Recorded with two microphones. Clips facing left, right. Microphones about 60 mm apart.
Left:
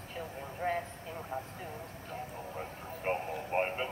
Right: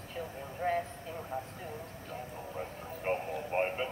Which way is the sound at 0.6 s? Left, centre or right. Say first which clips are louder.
Right 2 dB; centre.